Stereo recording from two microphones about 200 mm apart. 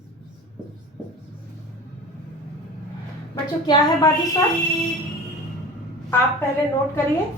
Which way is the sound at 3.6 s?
20° left (ahead or behind).